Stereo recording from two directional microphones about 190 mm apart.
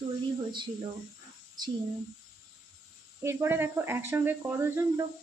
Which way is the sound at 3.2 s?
15° right (ahead or behind).